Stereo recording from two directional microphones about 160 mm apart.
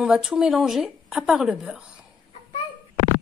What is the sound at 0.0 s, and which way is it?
Speech, 5° right (ahead or behind).